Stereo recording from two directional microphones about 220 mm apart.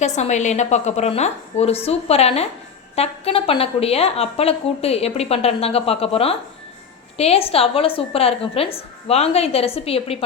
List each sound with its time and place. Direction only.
0.2 s a woman's voice: 30° left (ahead or behind)